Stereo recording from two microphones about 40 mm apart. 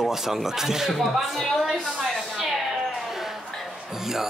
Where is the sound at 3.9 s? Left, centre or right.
Centre.